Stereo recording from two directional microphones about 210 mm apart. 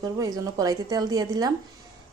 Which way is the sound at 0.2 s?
15° right (ahead or behind).